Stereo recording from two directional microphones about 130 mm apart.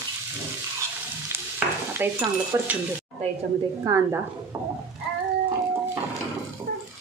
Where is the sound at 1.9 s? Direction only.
20° right (ahead or behind).